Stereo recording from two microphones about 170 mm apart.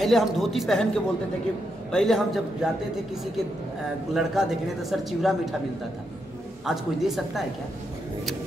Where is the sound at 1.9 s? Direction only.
Centre (ahead or behind).